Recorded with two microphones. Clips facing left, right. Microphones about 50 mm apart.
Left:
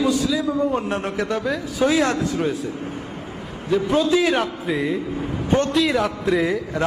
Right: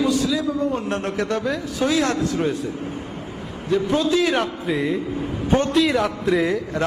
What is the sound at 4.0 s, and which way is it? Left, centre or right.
A man's voice, centre.